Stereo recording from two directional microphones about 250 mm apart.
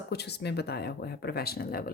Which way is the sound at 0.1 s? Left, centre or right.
Left.